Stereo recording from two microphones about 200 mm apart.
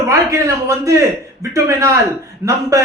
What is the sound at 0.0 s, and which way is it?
A man's voice, 15° right (ahead or behind).